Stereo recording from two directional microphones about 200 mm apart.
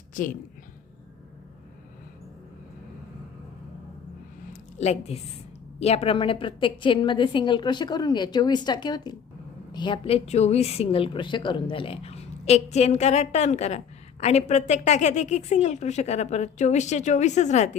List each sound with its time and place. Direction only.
0.1 s a woman's voice: 40° left (ahead or behind)
4.5 s a sound: 35° left (ahead or behind)
5.8 s a woman's voice: 30° left (ahead or behind)